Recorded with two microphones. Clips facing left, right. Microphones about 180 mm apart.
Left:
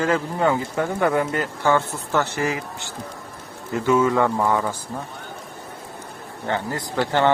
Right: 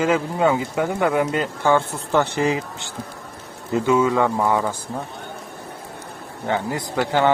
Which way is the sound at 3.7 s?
20° right (ahead or behind).